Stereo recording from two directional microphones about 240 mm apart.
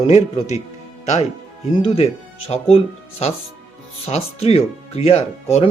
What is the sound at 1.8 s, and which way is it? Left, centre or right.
Speech, left.